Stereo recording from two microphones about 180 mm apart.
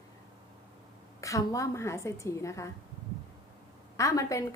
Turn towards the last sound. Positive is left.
turn(degrees=20)  # may be behind; listen again after turning